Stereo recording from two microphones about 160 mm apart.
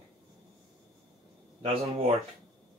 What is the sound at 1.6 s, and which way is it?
Speech, 40° right (ahead or behind).